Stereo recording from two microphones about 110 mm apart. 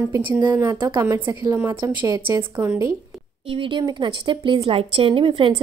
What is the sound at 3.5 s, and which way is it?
Speech, 50° right (ahead or behind).